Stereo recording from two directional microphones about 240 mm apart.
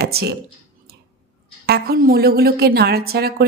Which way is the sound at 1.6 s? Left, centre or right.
Right.